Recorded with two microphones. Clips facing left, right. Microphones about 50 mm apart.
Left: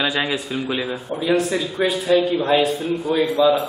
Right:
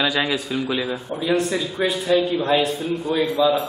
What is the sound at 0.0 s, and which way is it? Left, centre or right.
A man's voice, centre.